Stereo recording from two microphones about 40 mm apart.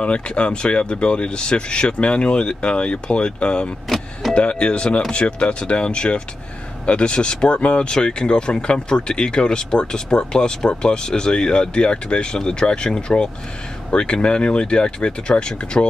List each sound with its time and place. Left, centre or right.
0.0 s speech: left